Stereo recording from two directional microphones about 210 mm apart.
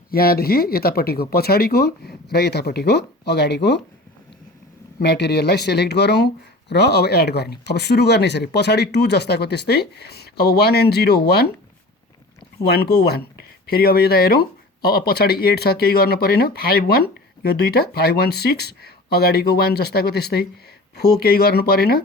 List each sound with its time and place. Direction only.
0.1 s speech: 45° left (ahead or behind)
4.9 s speech: 50° left (ahead or behind)
12.6 s speech: 50° left (ahead or behind)